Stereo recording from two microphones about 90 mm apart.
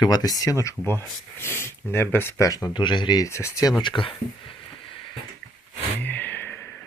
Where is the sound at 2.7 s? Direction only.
60° left (ahead or behind).